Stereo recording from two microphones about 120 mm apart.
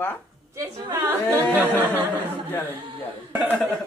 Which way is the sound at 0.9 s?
20° right (ahead or behind).